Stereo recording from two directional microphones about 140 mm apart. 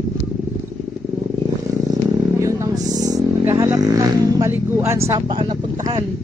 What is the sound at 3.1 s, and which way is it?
Vehicle, 20° right (ahead or behind).